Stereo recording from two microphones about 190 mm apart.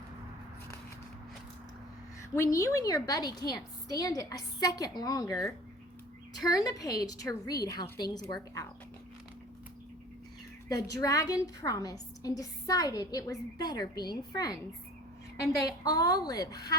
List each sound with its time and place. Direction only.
2.3 s a woman's voice: 15° left (ahead or behind)
10.7 s a woman's voice: 20° left (ahead or behind)
15.6 s a woman's voice: 20° left (ahead or behind)